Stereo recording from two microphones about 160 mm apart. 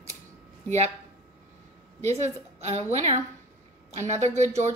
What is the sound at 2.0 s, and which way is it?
A woman's voice, 45° right (ahead or behind).